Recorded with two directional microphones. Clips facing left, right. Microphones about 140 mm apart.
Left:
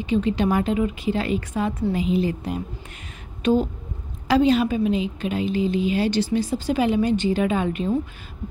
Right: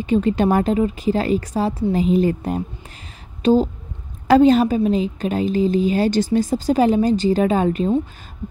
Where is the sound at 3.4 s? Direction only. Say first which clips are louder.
Right 4 dB; 35° right (ahead or behind).